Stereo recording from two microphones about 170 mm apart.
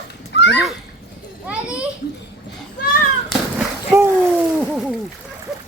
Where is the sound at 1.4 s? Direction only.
5° right (ahead or behind).